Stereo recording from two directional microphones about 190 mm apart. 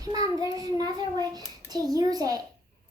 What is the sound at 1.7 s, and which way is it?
Speech, 20° right (ahead or behind).